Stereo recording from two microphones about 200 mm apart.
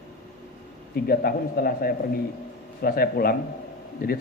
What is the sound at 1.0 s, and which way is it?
Speech, 50° left (ahead or behind).